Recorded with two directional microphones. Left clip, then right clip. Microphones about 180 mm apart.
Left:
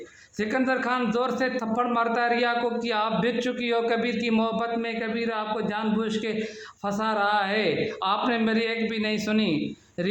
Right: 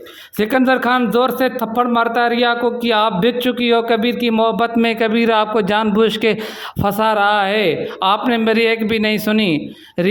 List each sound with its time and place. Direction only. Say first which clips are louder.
0.3 s a man's voice: right 10 dB; 50° right (ahead or behind)